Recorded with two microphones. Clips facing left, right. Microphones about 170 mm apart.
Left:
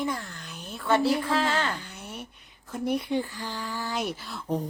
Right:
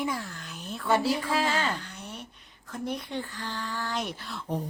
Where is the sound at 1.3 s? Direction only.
10° right (ahead or behind).